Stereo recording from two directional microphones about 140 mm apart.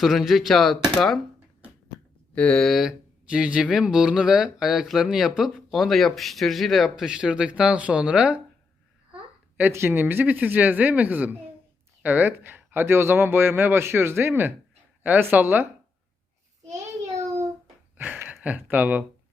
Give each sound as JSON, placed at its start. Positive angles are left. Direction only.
{"t": 0.0, "sound": "speech", "side_deg": 0}
{"t": 2.3, "sound": "speech", "side_deg": 10}
{"t": 9.6, "sound": "speech", "side_deg": -15}
{"t": 17.9, "sound": "a sound", "side_deg": -10}